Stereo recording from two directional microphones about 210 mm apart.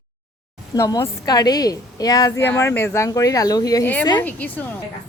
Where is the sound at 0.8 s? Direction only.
15° left (ahead or behind).